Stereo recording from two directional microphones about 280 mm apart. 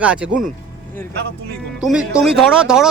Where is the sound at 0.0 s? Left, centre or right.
Centre.